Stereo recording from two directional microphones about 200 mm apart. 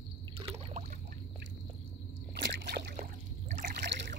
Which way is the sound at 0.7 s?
40° right (ahead or behind).